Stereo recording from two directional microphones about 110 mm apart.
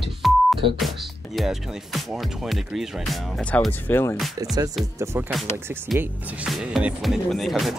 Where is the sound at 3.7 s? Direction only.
20° left (ahead or behind).